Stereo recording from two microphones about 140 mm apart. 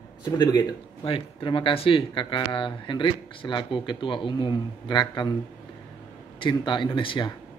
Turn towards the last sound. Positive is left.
turn(degrees=35)  # may be behind; listen again after turning